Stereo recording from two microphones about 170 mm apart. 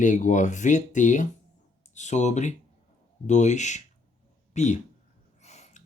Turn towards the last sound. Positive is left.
turn(degrees=40)  # may be behind; listen again after turning